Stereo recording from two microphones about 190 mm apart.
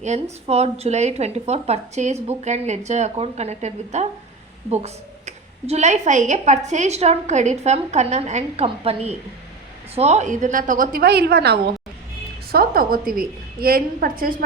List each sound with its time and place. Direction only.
0.0 s a woman's voice: 35° right (ahead or behind)